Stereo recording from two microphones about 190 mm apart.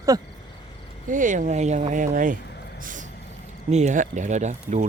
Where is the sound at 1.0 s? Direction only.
45° right (ahead or behind).